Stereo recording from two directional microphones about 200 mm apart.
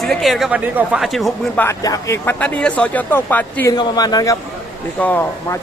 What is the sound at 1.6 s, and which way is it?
Speech, 15° left (ahead or behind).